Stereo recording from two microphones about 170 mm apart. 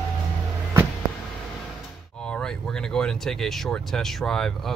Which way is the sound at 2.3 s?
5° left (ahead or behind).